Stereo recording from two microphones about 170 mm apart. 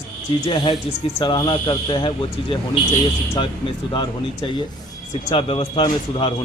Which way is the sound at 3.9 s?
25° left (ahead or behind).